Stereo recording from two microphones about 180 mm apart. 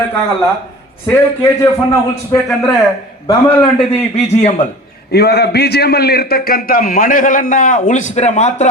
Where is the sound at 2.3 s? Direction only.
20° left (ahead or behind).